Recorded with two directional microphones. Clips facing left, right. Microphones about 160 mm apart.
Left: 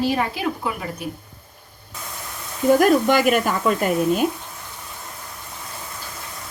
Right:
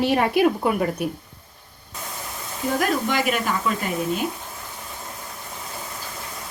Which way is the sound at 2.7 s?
50° left (ahead or behind).